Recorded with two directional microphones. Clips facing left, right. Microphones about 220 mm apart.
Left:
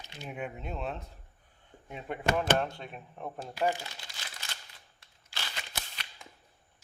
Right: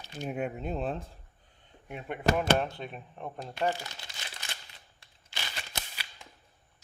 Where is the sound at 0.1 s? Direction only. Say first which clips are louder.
Right 6 dB; 45° right (ahead or behind).